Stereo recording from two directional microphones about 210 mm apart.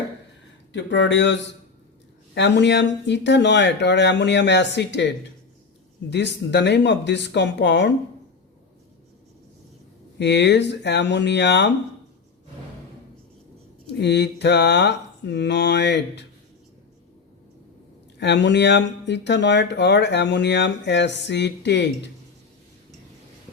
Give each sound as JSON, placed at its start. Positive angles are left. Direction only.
{"t": 0.7, "sound": "speech", "side_deg": 60}
{"t": 10.2, "sound": "speech", "side_deg": 55}
{"t": 14.0, "sound": "speech", "side_deg": 55}
{"t": 18.2, "sound": "speech", "side_deg": 55}